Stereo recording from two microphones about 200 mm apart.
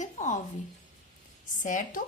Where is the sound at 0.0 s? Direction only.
40° left (ahead or behind).